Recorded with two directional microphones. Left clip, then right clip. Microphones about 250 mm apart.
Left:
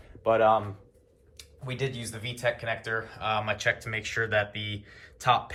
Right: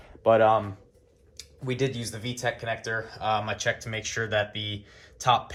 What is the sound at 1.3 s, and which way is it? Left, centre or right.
Speech, right.